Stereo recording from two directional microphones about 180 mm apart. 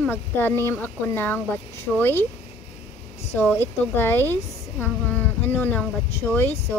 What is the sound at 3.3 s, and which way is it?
A woman's voice, 10° left (ahead or behind).